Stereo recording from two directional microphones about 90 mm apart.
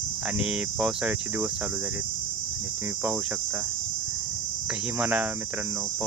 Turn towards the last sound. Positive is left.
turn(degrees=-20)  # may be behind; listen again after turning